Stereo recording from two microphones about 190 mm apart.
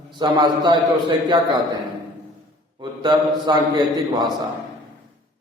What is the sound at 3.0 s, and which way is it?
A man's voice, 20° right (ahead or behind).